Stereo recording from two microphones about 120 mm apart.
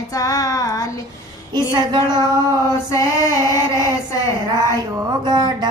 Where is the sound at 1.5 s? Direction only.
35° right (ahead or behind).